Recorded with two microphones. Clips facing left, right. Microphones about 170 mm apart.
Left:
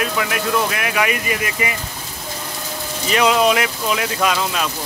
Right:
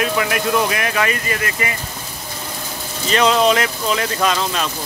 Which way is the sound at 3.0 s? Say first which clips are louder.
Right 1 dB; 10° left (ahead or behind).